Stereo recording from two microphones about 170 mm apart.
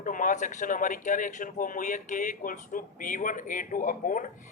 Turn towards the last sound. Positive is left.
turn(degrees=50)  # may be behind; listen again after turning